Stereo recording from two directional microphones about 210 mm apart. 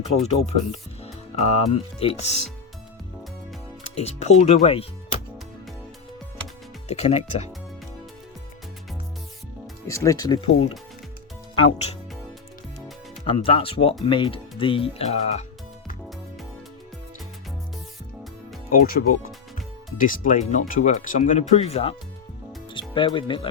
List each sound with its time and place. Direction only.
0.0 s speech: 30° left (ahead or behind)
3.8 s speech: 30° left (ahead or behind)
6.8 s speech: 30° left (ahead or behind)
9.8 s speech: 15° left (ahead or behind)
11.5 s speech: 30° left (ahead or behind)
13.2 s speech: 25° left (ahead or behind)
18.9 s speech: 45° left (ahead or behind); by 23.5 s 25° left (ahead or behind)